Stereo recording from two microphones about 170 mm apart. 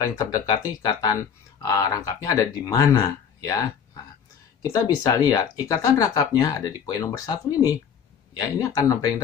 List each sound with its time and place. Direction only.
0.0 s speech: 20° left (ahead or behind)